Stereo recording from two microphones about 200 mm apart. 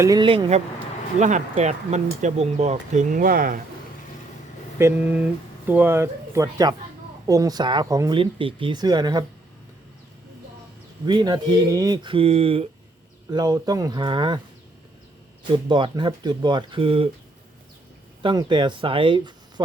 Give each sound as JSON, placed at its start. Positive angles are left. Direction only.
{"t": 0.0, "sound": "speech", "side_deg": -20}
{"t": 4.8, "sound": "speech", "side_deg": -10}
{"t": 11.0, "sound": "speech", "side_deg": -20}
{"t": 13.3, "sound": "speech", "side_deg": -20}
{"t": 15.5, "sound": "speech", "side_deg": -25}
{"t": 18.2, "sound": "speech", "side_deg": -25}